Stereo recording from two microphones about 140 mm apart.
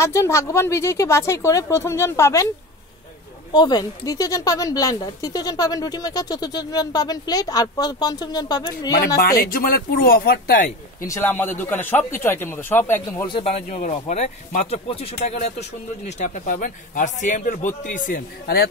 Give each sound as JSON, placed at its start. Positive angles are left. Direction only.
{"t": 0.0, "sound": "speech", "side_deg": 20}
{"t": 3.5, "sound": "speech", "side_deg": 30}
{"t": 9.2, "sound": "speech", "side_deg": 90}
{"t": 11.1, "sound": "speech", "side_deg": 15}
{"t": 13.4, "sound": "a man's voice", "side_deg": 50}